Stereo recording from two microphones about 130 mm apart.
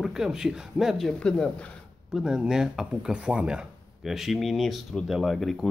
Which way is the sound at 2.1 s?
5° right (ahead or behind).